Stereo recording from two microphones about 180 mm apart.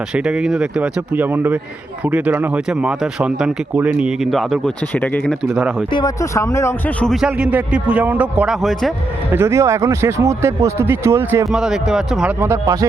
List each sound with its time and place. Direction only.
0.1 s speech: 5° right (ahead or behind)
5.5 s speech: 5° right (ahead or behind)
5.9 s speech: 20° left (ahead or behind)
7.0 s speech: centre (ahead or behind)
9.3 s speech: 15° right (ahead or behind)